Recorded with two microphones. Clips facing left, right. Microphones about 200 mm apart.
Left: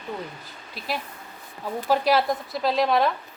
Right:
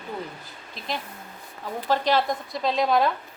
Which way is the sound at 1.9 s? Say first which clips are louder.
Left 2 dB; 5° left (ahead or behind).